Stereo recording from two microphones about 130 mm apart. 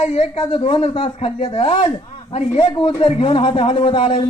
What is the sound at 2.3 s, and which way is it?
Speech, 55° left (ahead or behind).